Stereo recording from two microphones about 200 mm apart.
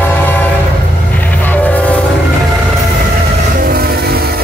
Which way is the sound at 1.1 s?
10° left (ahead or behind).